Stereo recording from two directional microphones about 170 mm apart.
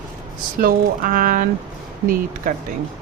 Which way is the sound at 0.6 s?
55° right (ahead or behind).